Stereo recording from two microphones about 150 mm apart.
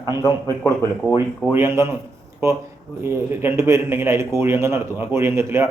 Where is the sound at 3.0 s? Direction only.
15° right (ahead or behind).